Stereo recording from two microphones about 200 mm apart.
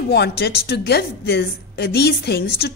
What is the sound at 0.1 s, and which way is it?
A woman's voice, 55° left (ahead or behind).